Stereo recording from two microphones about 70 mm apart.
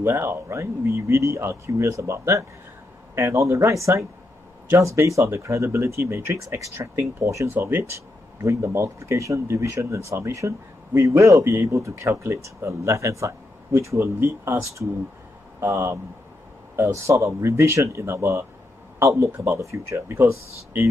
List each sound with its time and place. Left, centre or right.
0.0 s speech: right
7.4 s speech: right
8.4 s speech: right